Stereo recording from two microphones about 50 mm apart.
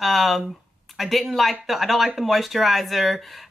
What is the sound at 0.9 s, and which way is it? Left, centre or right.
Speech, centre.